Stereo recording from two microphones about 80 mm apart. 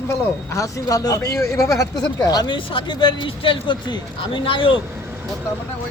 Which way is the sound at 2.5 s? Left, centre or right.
Left.